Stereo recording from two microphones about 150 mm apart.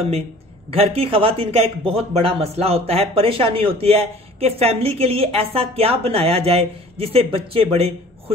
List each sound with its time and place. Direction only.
0.7 s speech: 40° right (ahead or behind)